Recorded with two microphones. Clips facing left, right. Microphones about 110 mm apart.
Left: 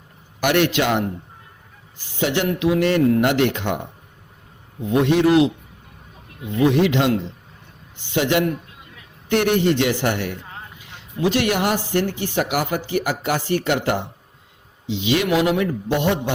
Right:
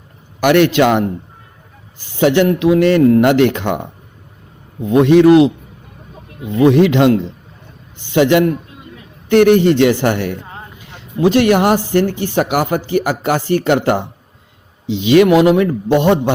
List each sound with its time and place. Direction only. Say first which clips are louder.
0.3 s a man's voice: right 7 dB; 65° right (ahead or behind)
2.1 s a man's voice: right 9 dB; 65° right (ahead or behind)
4.9 s a man's voice: right 8 dB; 65° right (ahead or behind)
6.6 s a man's voice: right 7 dB; 60° right (ahead or behind)
9.3 s speech: right 8 dB; 55° right (ahead or behind)
15.0 s speech: right 10 dB; 60° right (ahead or behind)